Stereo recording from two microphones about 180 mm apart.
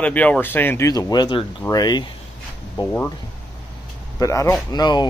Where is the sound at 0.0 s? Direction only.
10° left (ahead or behind).